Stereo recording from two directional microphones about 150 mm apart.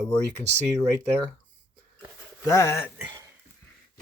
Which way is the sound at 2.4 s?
20° left (ahead or behind).